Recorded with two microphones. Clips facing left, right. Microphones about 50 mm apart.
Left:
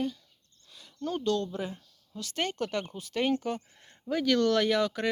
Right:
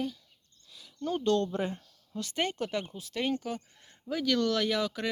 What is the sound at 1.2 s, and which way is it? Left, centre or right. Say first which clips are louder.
Speech: right 3 dB; right.